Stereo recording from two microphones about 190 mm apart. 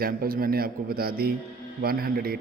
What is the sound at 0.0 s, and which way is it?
A man's voice, 50° right (ahead or behind).